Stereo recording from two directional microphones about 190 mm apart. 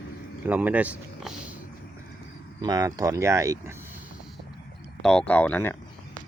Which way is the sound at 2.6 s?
20° right (ahead or behind).